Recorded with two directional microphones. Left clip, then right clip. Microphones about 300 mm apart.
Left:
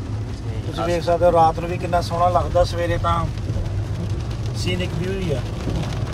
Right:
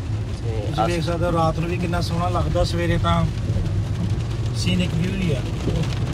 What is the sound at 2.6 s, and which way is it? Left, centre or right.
Speech, left.